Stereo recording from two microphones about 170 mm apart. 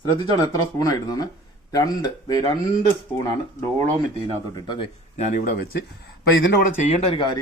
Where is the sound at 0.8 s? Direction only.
20° left (ahead or behind).